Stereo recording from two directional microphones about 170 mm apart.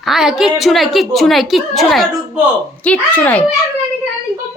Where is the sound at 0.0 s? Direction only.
Centre (ahead or behind).